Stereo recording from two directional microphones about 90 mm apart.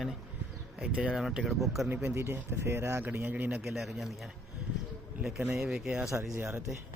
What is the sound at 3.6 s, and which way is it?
Speech, centre (ahead or behind).